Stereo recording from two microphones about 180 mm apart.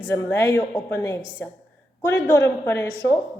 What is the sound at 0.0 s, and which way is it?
A woman's voice, 15° left (ahead or behind).